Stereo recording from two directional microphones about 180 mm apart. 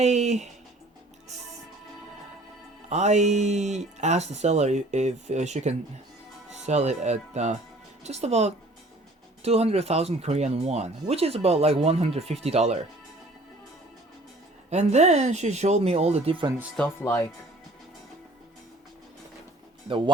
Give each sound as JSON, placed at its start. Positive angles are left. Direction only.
{"t": 0.0, "sound": "speech", "side_deg": -40}
{"t": 2.9, "sound": "speech", "side_deg": -40}
{"t": 14.7, "sound": "speech", "side_deg": -40}
{"t": 17.0, "sound": "speech", "side_deg": 15}